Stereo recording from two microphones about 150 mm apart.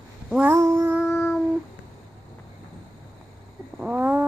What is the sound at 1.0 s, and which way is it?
Child singing, 5° left (ahead or behind).